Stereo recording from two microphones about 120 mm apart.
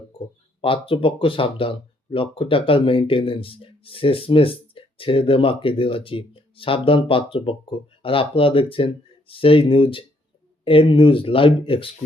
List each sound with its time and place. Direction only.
0.6 s speech: 50° left (ahead or behind)